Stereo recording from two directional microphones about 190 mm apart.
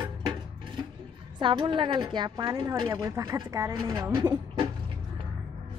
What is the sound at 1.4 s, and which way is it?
A woman's voice, 25° right (ahead or behind).